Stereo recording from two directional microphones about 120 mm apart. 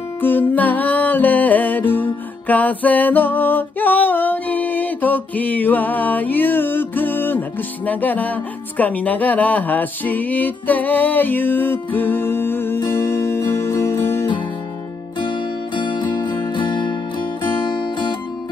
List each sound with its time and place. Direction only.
0.2 s music: 15° left (ahead or behind)
15.7 s music: 40° left (ahead or behind)